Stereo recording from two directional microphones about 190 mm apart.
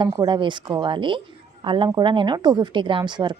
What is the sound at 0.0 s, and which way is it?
A woman's voice, 20° right (ahead or behind).